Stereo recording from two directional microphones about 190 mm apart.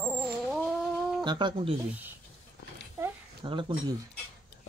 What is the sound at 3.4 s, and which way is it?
Speech, 25° right (ahead or behind).